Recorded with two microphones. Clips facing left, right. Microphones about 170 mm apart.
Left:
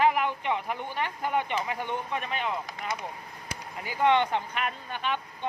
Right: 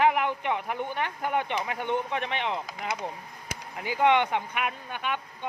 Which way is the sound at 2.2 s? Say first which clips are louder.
Right 2 dB; 85° right.